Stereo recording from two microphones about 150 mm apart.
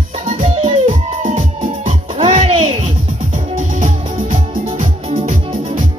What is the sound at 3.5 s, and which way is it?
Music, 55° right (ahead or behind).